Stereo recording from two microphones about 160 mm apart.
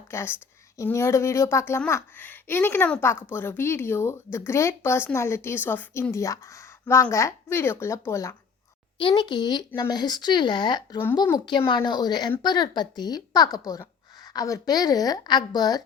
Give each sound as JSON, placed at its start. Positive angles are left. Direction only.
{"t": 0.1, "sound": "speech", "side_deg": 15}
{"t": 9.0, "sound": "a woman's voice", "side_deg": 30}